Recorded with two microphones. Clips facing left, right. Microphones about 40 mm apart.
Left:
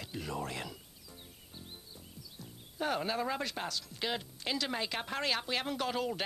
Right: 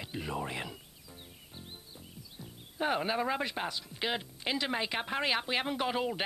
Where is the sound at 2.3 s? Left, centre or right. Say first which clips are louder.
Right 2 dB; right.